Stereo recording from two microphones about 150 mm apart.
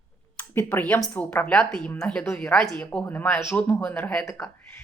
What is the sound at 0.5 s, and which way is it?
A woman's voice, 10° left (ahead or behind).